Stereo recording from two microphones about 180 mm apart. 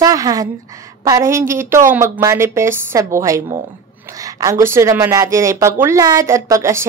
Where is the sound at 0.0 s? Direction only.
20° right (ahead or behind).